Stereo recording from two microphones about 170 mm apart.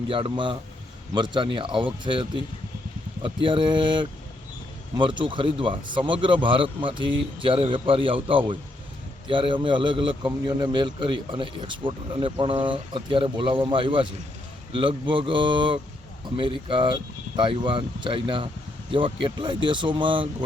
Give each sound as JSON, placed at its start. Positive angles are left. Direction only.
{"t": 0.1, "sound": "a man's voice", "side_deg": -30}